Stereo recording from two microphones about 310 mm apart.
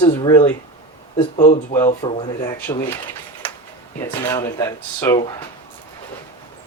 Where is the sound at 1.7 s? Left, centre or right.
Centre.